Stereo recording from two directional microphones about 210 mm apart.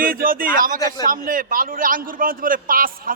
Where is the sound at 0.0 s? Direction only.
45° right (ahead or behind).